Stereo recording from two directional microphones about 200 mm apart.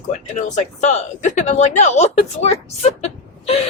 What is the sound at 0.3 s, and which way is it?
Speech, 35° left (ahead or behind).